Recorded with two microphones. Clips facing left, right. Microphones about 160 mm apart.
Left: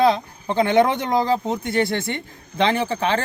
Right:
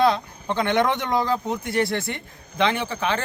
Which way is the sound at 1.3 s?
25° left (ahead or behind).